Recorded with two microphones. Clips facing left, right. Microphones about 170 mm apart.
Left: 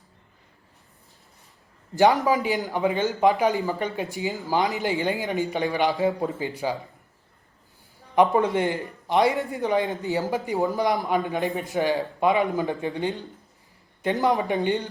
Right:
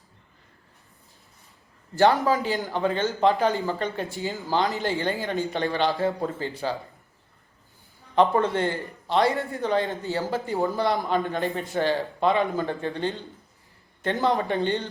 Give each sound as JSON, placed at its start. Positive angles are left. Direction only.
{"t": 2.0, "sound": "speech", "side_deg": 15}
{"t": 8.1, "sound": "speech", "side_deg": 15}